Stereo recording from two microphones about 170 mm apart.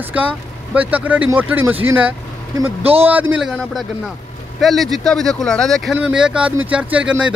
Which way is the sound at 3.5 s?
Centre (ahead or behind).